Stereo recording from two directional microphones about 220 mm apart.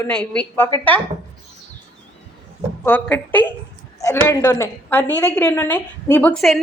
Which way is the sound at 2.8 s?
10° left (ahead or behind).